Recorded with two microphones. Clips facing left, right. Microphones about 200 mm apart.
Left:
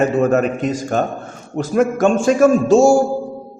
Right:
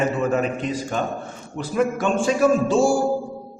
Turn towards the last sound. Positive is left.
turn(degrees=45)  # may be behind; listen again after turning